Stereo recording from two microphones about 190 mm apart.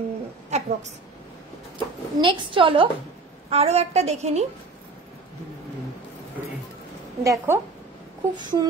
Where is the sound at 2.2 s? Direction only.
25° right (ahead or behind).